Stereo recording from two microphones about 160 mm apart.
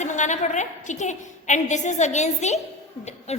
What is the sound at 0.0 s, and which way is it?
A woman's voice, 50° left (ahead or behind).